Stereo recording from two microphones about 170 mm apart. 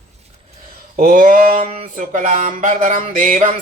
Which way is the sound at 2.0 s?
50° right (ahead or behind).